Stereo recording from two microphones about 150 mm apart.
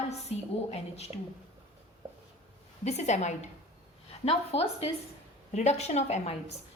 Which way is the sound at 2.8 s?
50° left (ahead or behind).